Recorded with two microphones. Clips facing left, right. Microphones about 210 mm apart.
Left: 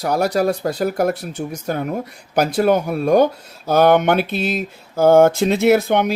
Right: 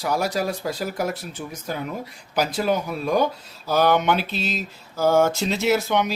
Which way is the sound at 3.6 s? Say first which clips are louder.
Left 6 dB; 50° left (ahead or behind).